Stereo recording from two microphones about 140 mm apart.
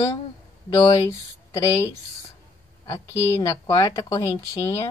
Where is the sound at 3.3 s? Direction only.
25° left (ahead or behind).